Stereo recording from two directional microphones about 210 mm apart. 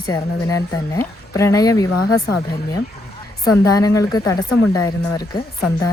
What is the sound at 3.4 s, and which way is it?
Speech, 15° left (ahead or behind).